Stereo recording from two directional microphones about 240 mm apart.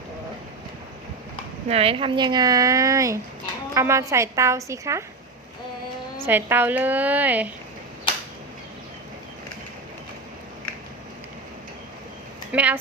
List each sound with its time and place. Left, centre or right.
1.6 s a woman's voice: right
6.2 s a woman's voice: centre
12.5 s speech: centre